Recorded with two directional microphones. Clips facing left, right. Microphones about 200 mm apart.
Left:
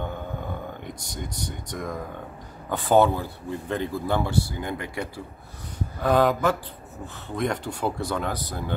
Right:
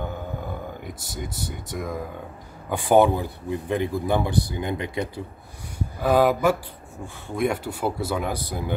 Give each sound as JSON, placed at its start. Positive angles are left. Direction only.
{"t": 0.0, "sound": "a sound", "side_deg": -5}
{"t": 2.7, "sound": "a man's voice", "side_deg": -15}
{"t": 5.8, "sound": "a man's voice", "side_deg": -10}